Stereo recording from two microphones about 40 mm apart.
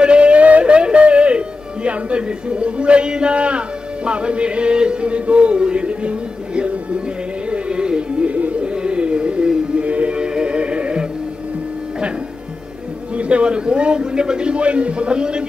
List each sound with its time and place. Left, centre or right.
0.0 s speech: right
7.4 s music: right
8.3 s music: right
13.1 s a man's voice: right